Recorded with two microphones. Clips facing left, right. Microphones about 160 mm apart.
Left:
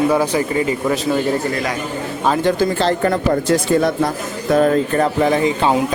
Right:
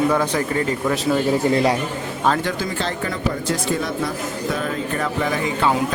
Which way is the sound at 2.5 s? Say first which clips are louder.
Left 8 dB; 35° left (ahead or behind).